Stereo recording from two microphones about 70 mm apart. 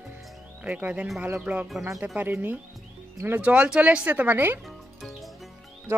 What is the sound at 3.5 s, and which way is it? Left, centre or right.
Speech, centre.